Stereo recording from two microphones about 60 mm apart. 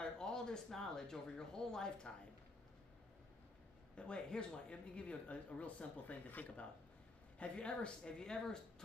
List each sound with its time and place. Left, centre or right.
0.0 s speech: centre
3.9 s speech: centre